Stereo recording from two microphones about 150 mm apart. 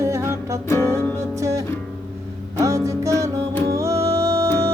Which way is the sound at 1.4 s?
20° right (ahead or behind).